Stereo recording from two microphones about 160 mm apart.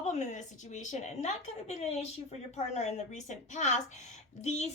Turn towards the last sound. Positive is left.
turn(degrees=45)  # may be behind; listen again after turning